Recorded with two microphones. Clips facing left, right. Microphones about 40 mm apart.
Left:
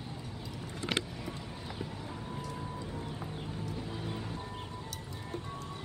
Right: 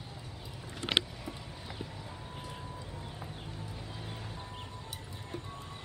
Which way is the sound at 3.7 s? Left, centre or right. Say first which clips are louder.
Left 5 dB; centre.